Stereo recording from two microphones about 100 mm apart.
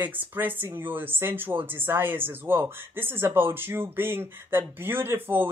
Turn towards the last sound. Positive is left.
turn(degrees=-20)  # may be behind; listen again after turning